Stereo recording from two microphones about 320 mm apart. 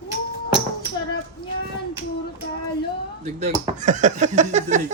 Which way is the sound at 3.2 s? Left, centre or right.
Right.